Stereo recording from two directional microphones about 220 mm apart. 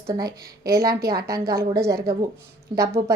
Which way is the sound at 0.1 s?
15° right (ahead or behind).